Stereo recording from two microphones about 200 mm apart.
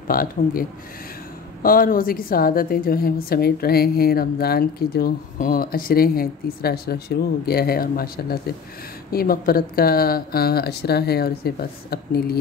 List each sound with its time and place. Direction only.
0.1 s a woman's voice: 45° left (ahead or behind)